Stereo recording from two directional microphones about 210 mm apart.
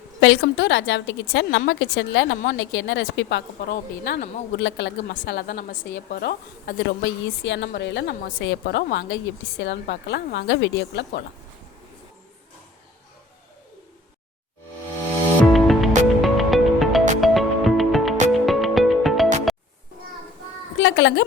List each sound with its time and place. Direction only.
0.2 s a woman's voice: 60° left (ahead or behind)
5.1 s a woman's voice: 45° left (ahead or behind)
15.5 s music: centre (ahead or behind)
20.7 s a sound: 60° left (ahead or behind)